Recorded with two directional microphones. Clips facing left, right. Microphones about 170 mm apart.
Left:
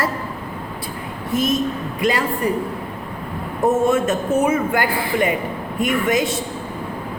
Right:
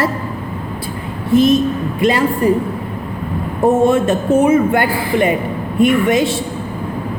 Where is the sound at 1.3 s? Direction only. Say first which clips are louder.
Right 8 dB; 30° right (ahead or behind).